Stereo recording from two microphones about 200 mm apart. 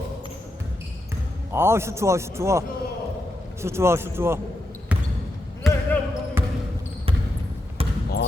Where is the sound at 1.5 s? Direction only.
10° right (ahead or behind).